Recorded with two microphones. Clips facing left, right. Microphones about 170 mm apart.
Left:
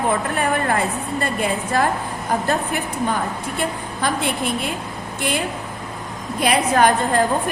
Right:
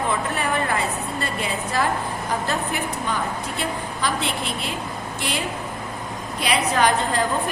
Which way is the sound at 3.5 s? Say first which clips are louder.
Left 5 dB; 50° left (ahead or behind).